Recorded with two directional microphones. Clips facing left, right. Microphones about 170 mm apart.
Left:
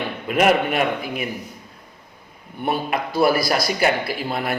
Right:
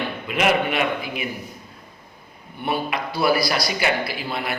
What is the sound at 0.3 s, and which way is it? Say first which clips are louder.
Speech: left 3 dB; 45° left (ahead or behind).